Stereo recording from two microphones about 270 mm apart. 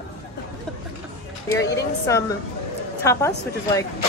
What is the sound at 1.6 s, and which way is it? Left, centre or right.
A woman's voice, centre.